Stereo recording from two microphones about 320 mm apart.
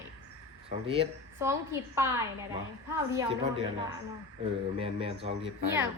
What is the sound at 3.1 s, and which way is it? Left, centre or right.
A woman's voice, centre.